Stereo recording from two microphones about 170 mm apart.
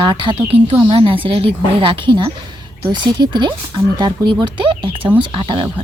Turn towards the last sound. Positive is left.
turn(degrees=-30)  # may be behind; listen again after turning